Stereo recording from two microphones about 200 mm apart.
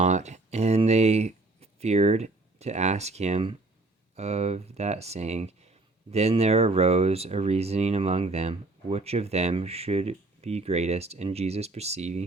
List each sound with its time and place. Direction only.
0.0 s speech: 35° right (ahead or behind)